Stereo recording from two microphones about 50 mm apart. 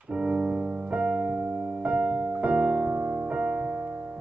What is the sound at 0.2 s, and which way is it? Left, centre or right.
Music, right.